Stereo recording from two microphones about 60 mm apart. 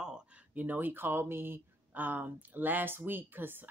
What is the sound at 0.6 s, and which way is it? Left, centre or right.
Speech, right.